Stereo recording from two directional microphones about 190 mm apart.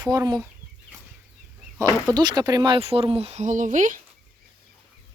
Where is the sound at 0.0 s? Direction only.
20° right (ahead or behind).